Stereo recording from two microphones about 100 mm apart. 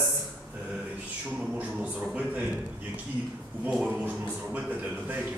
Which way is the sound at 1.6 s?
10° right (ahead or behind).